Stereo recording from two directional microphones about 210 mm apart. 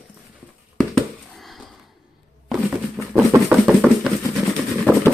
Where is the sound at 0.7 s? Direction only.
Centre (ahead or behind).